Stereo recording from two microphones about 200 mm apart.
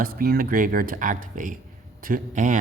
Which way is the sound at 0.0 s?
45° right (ahead or behind).